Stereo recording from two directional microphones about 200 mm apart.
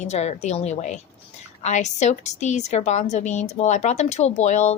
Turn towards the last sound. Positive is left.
turn(degrees=35)  # may be behind; listen again after turning